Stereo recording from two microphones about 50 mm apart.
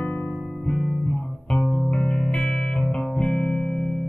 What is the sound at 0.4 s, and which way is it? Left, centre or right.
Music, centre.